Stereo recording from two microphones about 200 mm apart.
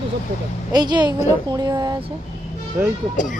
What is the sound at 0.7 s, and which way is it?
A woman's voice, 20° right (ahead or behind).